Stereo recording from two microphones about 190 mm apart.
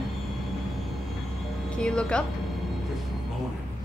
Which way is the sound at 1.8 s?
5° left (ahead or behind).